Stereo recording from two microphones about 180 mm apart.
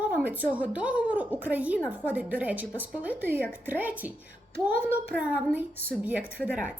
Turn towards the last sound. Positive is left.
turn(degrees=-5)  # may be behind; listen again after turning